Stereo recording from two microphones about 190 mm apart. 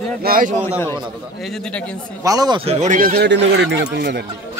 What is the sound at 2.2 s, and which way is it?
Speech, 20° right (ahead or behind).